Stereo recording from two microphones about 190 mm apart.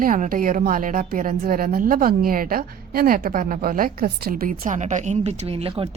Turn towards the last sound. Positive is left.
turn(degrees=-30)  # may be behind; listen again after turning